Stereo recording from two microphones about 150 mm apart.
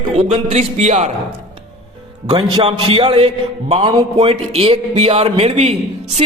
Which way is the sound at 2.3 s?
30° right (ahead or behind).